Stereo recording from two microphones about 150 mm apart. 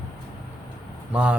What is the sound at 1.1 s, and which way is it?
Speech, 10° right (ahead or behind).